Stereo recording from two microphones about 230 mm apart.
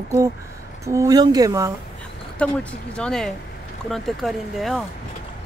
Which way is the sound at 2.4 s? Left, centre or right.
Centre.